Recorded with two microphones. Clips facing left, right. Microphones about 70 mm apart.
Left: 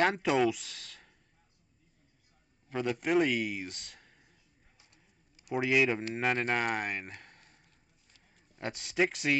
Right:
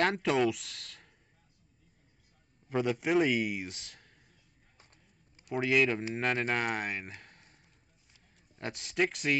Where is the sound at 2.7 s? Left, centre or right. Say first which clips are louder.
Right 1 dB; centre.